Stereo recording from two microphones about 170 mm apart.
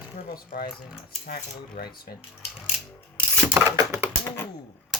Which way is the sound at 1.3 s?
65° left (ahead or behind).